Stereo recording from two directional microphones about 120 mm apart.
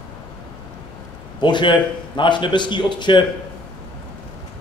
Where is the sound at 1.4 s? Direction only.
40° left (ahead or behind).